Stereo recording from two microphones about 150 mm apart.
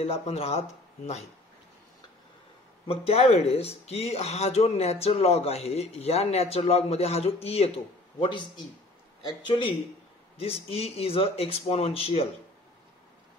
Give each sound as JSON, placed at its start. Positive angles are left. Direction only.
{"t": 0.0, "sound": "speech", "side_deg": 45}
{"t": 2.9, "sound": "speech", "side_deg": 40}